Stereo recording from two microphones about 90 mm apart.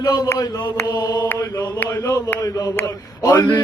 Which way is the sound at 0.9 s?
50° left (ahead or behind).